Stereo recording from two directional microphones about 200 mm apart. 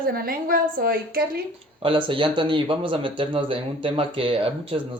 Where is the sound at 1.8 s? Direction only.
25° right (ahead or behind).